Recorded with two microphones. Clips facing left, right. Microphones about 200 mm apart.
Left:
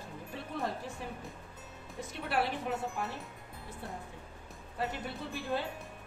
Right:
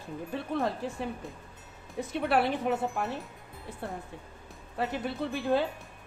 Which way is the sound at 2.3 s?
65° right (ahead or behind).